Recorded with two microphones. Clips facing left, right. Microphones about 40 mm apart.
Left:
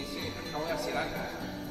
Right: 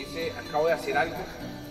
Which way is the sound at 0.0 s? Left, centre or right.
Right.